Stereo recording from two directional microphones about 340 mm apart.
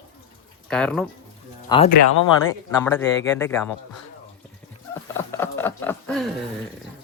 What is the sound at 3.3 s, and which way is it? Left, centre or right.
Patter, centre.